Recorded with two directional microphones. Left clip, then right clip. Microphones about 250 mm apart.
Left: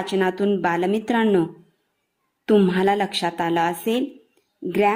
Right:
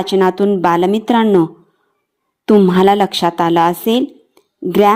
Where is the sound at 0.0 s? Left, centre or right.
Centre.